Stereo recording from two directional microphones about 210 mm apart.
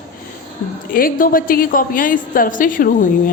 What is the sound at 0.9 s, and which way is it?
A woman's voice, 45° left (ahead or behind).